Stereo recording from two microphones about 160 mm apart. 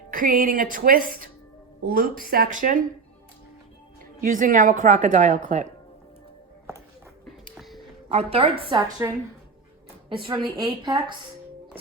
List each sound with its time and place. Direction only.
0.1 s a woman's voice: 60° right (ahead or behind)
4.2 s a woman's voice: 55° right (ahead or behind)
7.5 s a sound: centre (ahead or behind)
8.1 s a woman's voice: 40° right (ahead or behind)
8.6 s a woman's voice: 25° right (ahead or behind)
10.2 s a woman's voice: 30° right (ahead or behind)